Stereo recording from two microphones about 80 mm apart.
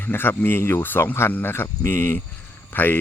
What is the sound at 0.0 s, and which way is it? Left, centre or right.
Speech, left.